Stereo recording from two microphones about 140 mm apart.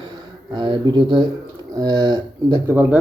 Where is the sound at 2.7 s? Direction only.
15° right (ahead or behind).